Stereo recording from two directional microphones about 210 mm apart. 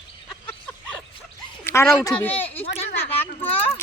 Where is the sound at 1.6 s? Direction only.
15° left (ahead or behind).